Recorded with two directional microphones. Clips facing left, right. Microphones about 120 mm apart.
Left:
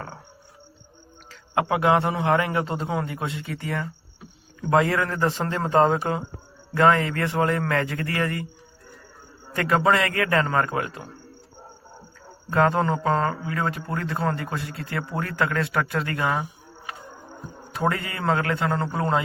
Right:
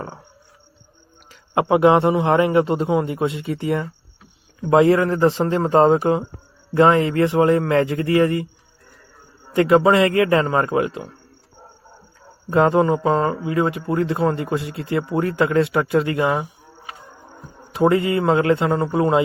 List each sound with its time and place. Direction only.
1.3 s a man's voice: 25° right (ahead or behind)
9.6 s a man's voice: 20° right (ahead or behind)
12.5 s a man's voice: 20° right (ahead or behind)
17.7 s a man's voice: 20° right (ahead or behind)